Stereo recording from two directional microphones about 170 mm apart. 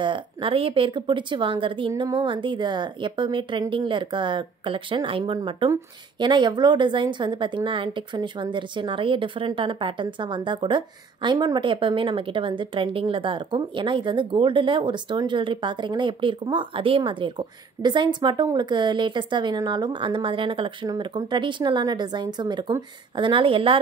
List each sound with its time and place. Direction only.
0.0 s a woman's voice: 30° right (ahead or behind)